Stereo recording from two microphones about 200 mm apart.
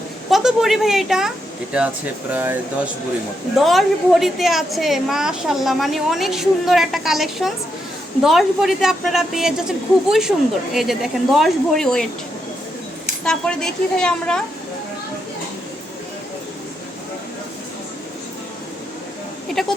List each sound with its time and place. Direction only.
0.3 s a woman's voice: centre (ahead or behind)
2.3 s a woman's voice: 10° right (ahead or behind)
13.2 s a woman's voice: 5° left (ahead or behind)
19.6 s a sound: centre (ahead or behind)